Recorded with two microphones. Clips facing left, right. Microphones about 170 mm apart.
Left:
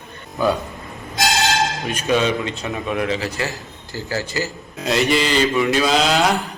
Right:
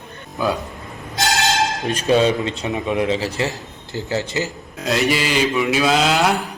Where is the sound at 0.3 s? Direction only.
Centre (ahead or behind).